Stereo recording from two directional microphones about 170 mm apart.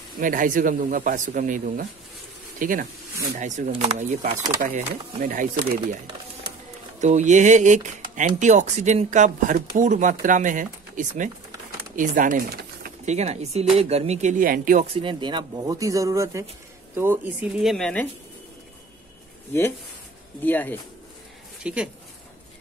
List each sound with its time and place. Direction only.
0.2 s speech: 50° right (ahead or behind)
7.0 s speech: 45° right (ahead or behind)
13.0 s speech: 40° right (ahead or behind)
14.9 s speech: 30° right (ahead or behind); by 18.0 s 5° left (ahead or behind)
20.4 s speech: 10° left (ahead or behind)
21.6 s speech: 5° right (ahead or behind)